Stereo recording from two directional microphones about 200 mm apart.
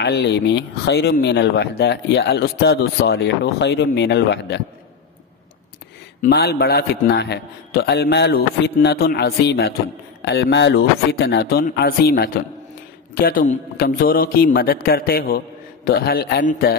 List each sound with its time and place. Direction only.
0.0 s speech: 60° left (ahead or behind)
6.2 s a man's voice: 50° left (ahead or behind)